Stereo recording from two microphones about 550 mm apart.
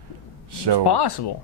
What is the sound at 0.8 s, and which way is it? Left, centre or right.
Speech, left.